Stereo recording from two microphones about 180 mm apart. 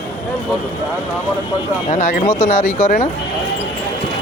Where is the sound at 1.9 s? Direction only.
40° left (ahead or behind).